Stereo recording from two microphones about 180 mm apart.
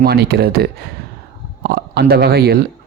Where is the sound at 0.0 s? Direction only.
60° right (ahead or behind).